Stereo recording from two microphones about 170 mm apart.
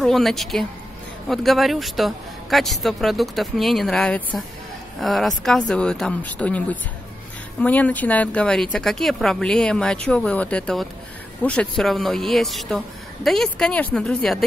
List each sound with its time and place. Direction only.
0.0 s a man's voice: centre (ahead or behind)